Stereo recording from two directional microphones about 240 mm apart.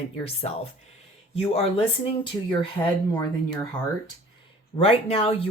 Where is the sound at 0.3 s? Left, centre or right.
Left.